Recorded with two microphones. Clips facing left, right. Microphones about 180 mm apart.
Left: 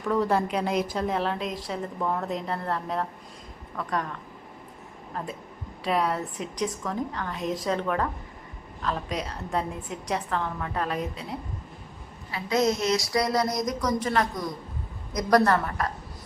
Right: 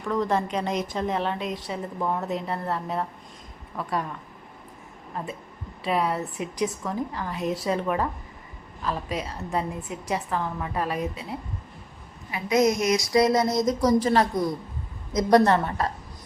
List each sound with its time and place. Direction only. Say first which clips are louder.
0.0 s a woman's voice: left 1 dB; 5° left (ahead or behind)
5.8 s a woman's voice: right 1 dB; centre (ahead or behind)
12.3 s a woman's voice: right 3 dB; 15° right (ahead or behind)